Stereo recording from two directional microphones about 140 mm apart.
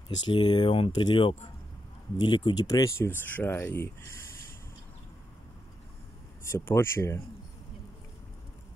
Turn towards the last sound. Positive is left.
turn(degrees=15)  # may be behind; listen again after turning